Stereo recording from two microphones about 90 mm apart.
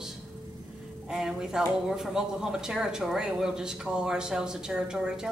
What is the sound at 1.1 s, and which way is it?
Speech, 5° right (ahead or behind).